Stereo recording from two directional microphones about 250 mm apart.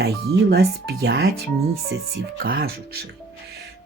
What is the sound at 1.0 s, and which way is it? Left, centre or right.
Speech, right.